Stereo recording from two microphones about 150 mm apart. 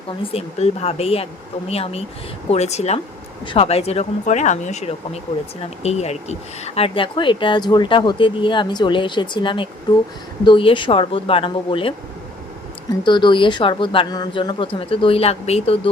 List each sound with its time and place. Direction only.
0.3 s speech: 45° left (ahead or behind)
13.1 s speech: 30° left (ahead or behind)